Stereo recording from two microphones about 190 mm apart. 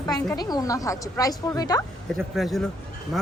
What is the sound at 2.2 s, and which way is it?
Speech, centre (ahead or behind).